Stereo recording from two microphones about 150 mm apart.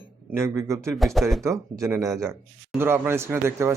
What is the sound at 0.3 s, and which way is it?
Speech, 20° right (ahead or behind).